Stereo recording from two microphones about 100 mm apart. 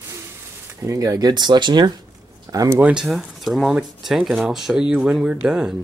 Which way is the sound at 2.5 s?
35° right (ahead or behind).